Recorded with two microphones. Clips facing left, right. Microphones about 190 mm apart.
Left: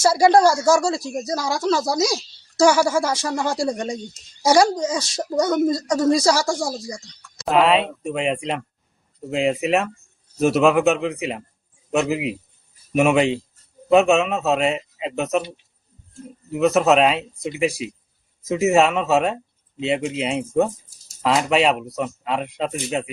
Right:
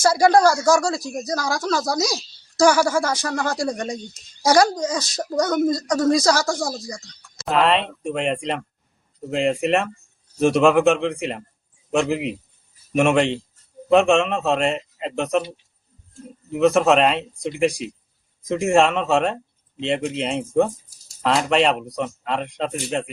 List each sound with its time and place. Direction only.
0.0 s speech: 5° left (ahead or behind)
1.5 s speech: 25° left (ahead or behind)
2.0 s speech: 10° left (ahead or behind)
2.6 s speech: 25° left (ahead or behind)
2.8 s speech: 5° left (ahead or behind)
16.5 s speech: centre (ahead or behind)